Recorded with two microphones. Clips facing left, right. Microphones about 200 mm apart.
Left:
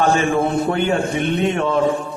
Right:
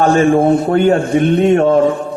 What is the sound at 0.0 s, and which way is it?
A man's voice, 45° right (ahead or behind).